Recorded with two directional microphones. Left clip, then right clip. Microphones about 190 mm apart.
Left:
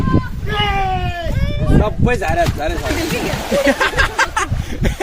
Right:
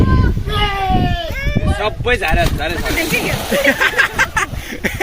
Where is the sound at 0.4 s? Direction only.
Centre (ahead or behind).